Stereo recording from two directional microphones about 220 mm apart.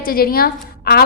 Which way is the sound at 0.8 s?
45° left (ahead or behind).